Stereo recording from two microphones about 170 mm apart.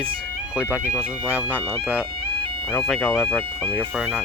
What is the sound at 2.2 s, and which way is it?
Music, 30° right (ahead or behind).